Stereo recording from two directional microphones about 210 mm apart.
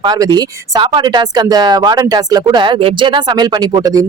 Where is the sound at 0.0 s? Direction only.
20° right (ahead or behind).